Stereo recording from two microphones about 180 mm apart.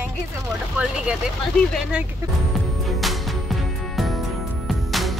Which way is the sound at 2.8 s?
Centre (ahead or behind).